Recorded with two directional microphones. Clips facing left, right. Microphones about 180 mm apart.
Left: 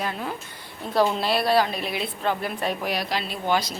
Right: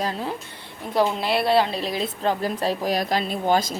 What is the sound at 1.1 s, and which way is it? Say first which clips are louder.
Speech: right 1 dB; 20° right (ahead or behind).